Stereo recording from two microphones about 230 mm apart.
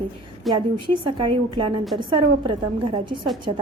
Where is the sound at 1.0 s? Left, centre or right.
Right.